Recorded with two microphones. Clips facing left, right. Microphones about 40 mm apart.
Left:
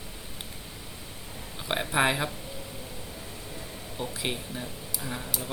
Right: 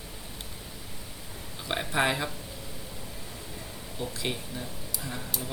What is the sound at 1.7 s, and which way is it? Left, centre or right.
Speech, centre.